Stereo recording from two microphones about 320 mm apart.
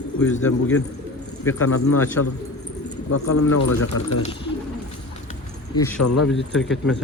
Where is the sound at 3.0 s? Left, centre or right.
Left.